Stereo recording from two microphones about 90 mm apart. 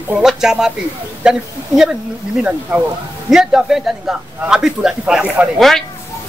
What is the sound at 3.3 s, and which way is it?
A man's voice, 5° right (ahead or behind).